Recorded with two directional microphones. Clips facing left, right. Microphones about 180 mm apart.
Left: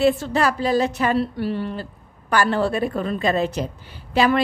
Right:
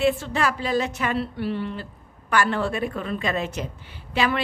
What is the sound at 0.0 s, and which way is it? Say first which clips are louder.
A woman's voice: left 4 dB; 40° left (ahead or behind).